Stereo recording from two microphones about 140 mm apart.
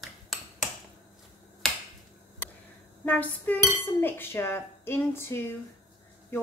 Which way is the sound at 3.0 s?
10° left (ahead or behind).